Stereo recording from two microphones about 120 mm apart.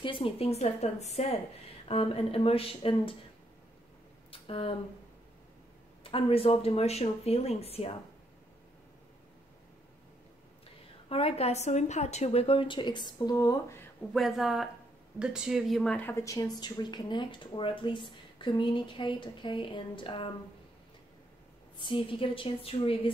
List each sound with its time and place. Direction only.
0.0 s speech: 50° left (ahead or behind); by 1.3 s 70° left (ahead or behind)
1.9 s a woman's voice: 55° left (ahead or behind)
4.3 s a sound: 50° left (ahead or behind)
6.0 s speech: 50° left (ahead or behind)
11.1 s a woman's voice: 55° left (ahead or behind); by 13.7 s 30° left (ahead or behind)
14.1 s speech: centre (ahead or behind)
16.0 s speech: 20° left (ahead or behind); by 20.2 s 45° left (ahead or behind)
21.7 s a woman's voice: 45° left (ahead or behind)